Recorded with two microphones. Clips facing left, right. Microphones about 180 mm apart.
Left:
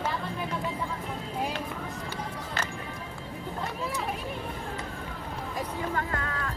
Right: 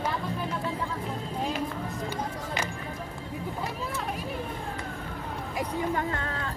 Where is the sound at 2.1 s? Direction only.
15° right (ahead or behind).